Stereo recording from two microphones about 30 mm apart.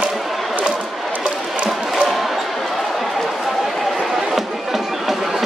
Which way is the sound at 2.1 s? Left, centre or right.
Centre.